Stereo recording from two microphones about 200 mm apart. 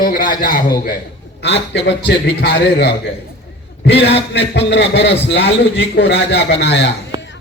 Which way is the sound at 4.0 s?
60° left (ahead or behind).